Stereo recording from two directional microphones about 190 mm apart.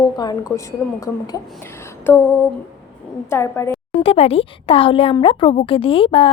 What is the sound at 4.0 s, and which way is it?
Speech, 30° left (ahead or behind).